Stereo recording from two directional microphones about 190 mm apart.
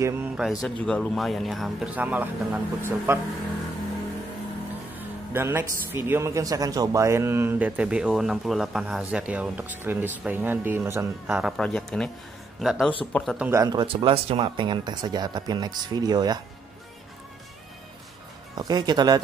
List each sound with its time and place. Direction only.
0.0 s speech: 15° right (ahead or behind)
0.4 s speech: centre (ahead or behind)
4.9 s speech: 10° right (ahead or behind)
11.5 s speech: 5° left (ahead or behind)
13.4 s speech: 15° right (ahead or behind)
18.5 s speech: 20° right (ahead or behind)